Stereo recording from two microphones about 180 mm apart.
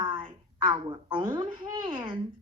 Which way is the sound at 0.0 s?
25° right (ahead or behind).